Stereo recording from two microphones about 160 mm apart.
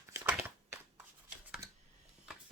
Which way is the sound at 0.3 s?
10° right (ahead or behind).